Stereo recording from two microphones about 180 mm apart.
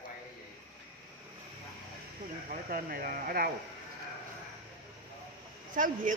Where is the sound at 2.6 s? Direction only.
55° right (ahead or behind).